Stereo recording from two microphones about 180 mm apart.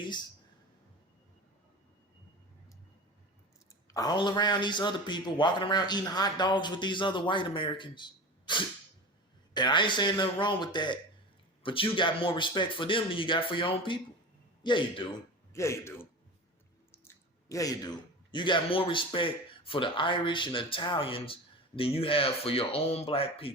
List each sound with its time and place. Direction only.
0.0 s a sound: 25° left (ahead or behind)
3.9 s a man's voice: 25° left (ahead or behind)
15.5 s a man's voice: 15° left (ahead or behind)
17.5 s a man's voice: 20° left (ahead or behind)